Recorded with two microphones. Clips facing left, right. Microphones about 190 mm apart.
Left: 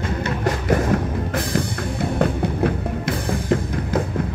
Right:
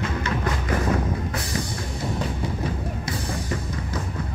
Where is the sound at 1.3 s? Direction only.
55° left (ahead or behind).